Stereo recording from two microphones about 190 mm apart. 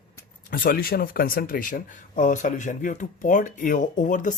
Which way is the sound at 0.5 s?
50° left (ahead or behind).